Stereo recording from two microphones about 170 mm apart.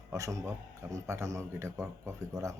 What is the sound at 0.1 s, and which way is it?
A man's voice, 20° right (ahead or behind).